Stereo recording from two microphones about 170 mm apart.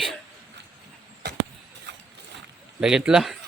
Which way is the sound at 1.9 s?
90° right.